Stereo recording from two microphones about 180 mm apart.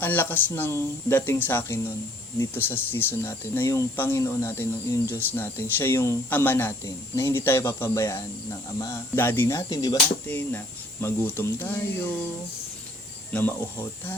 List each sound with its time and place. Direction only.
0.0 s speech: 10° left (ahead or behind)
10.2 s speech: 10° left (ahead or behind)
13.3 s speech: 10° left (ahead or behind)